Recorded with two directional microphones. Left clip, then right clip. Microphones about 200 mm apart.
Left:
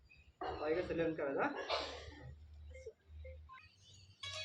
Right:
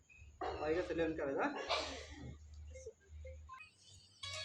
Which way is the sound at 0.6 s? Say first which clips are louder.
Even; 5° right (ahead or behind).